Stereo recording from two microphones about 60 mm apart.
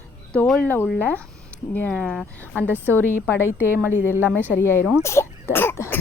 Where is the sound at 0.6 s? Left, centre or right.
Left.